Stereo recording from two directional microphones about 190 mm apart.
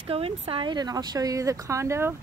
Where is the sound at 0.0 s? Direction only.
30° right (ahead or behind).